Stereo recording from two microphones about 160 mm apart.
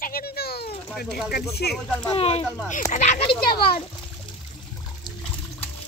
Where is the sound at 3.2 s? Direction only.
35° left (ahead or behind).